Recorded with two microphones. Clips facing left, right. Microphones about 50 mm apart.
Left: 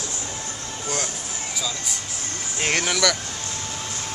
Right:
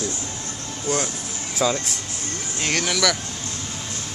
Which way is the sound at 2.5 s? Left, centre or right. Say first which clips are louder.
Left 1 dB; centre.